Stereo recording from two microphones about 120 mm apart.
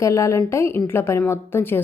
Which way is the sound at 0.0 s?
25° left (ahead or behind).